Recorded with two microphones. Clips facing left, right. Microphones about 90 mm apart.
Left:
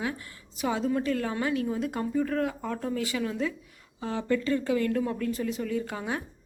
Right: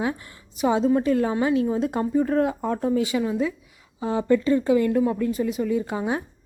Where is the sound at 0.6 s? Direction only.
25° right (ahead or behind).